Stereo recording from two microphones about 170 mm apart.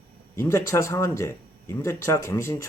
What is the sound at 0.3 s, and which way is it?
Speech, 15° left (ahead or behind).